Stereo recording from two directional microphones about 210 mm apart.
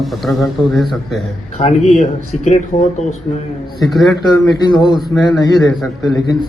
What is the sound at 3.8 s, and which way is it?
Speech, centre (ahead or behind).